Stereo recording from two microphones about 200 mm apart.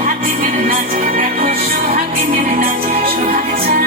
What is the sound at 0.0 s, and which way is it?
Music, 40° right (ahead or behind).